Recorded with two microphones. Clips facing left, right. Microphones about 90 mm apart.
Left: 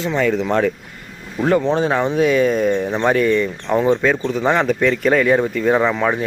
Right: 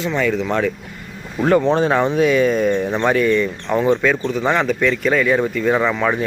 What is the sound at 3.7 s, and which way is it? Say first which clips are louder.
Speech: left 2 dB; 10° left (ahead or behind).